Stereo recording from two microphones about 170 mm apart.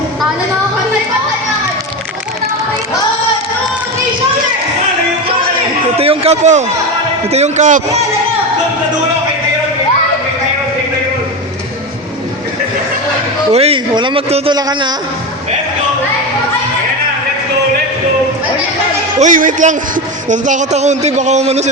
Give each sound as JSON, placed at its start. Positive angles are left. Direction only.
{"t": 6.0, "sound": "a sound", "side_deg": -35}
{"t": 7.3, "sound": "speech", "side_deg": -40}
{"t": 13.5, "sound": "a man's voice", "side_deg": -35}
{"t": 14.5, "sound": "a man's voice", "side_deg": -25}
{"t": 19.2, "sound": "speech", "side_deg": -50}